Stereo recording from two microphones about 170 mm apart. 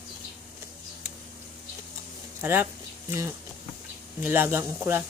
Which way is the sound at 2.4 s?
15° right (ahead or behind).